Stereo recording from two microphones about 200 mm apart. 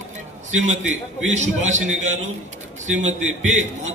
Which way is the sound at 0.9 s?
35° right (ahead or behind).